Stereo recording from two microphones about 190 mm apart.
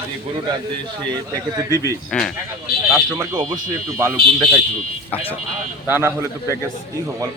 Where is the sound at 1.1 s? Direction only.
20° right (ahead or behind).